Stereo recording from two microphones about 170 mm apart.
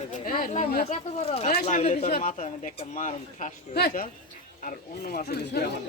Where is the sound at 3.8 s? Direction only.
60° left (ahead or behind).